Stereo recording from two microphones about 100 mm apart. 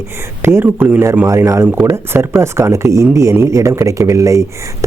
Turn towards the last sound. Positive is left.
turn(degrees=-30)  # may be behind; listen again after turning